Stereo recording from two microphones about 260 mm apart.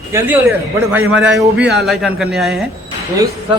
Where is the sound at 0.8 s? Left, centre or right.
Centre.